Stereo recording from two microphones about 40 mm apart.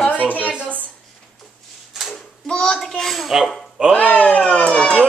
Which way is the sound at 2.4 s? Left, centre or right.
Left.